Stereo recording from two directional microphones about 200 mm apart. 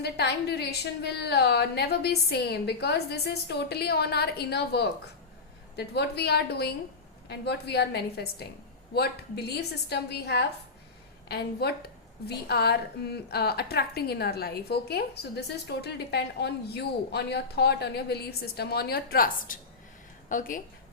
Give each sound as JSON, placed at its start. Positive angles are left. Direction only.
{"t": 0.0, "sound": "a woman's voice", "side_deg": 55}